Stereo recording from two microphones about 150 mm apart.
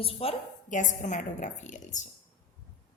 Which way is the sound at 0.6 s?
55° left (ahead or behind).